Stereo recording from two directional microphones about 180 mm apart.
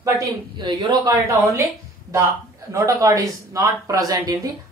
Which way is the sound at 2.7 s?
15° right (ahead or behind).